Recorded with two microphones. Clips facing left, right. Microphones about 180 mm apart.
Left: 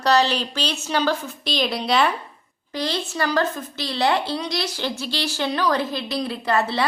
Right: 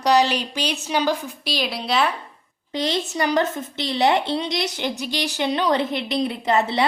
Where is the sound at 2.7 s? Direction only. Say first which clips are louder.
Right 2 dB; 20° right (ahead or behind).